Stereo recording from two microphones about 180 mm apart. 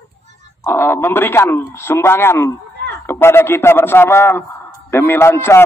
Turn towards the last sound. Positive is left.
turn(degrees=15)  # may be behind; listen again after turning